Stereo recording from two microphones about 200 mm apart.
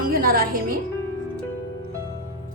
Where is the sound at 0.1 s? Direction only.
50° right (ahead or behind).